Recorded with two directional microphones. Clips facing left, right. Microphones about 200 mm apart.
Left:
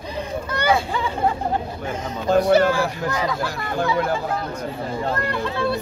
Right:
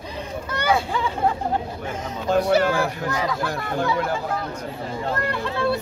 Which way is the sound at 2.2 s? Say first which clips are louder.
Left 3 dB; 40° left (ahead or behind).